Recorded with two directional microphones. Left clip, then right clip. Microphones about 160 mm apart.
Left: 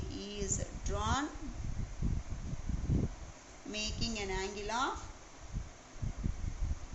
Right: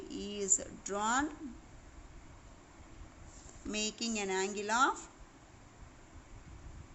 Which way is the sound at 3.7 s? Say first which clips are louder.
Right 1 dB; 40° right (ahead or behind).